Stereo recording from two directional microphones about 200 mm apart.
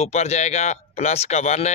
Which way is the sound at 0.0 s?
35° left (ahead or behind).